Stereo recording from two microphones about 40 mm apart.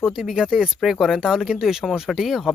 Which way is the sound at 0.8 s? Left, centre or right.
Centre.